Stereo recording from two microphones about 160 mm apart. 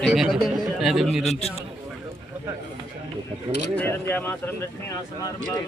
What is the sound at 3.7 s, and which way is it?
Speech, 10° left (ahead or behind).